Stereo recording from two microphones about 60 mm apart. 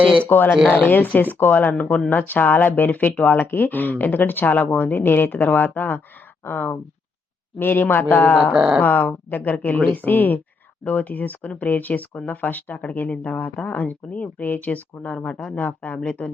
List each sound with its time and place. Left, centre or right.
0.3 s speech: left
8.5 s speech: centre
8.8 s speech: left